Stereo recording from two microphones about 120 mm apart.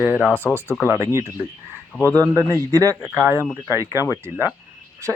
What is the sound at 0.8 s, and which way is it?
Speech, 20° right (ahead or behind).